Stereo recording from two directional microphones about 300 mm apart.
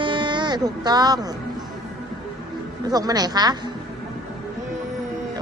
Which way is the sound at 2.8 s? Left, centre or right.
Centre.